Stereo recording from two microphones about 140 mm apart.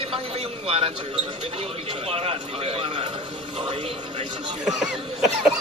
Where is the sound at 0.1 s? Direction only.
45° right (ahead or behind).